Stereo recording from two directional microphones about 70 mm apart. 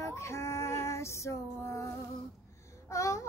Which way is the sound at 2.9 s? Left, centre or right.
Left.